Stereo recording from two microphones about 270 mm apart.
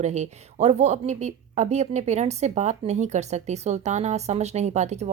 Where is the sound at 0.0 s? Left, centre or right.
Right.